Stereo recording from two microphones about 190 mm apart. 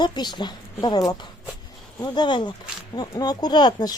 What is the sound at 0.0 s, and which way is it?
Speech, 25° left (ahead or behind).